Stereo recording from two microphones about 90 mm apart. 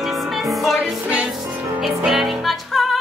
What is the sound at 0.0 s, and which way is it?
Music, centre (ahead or behind).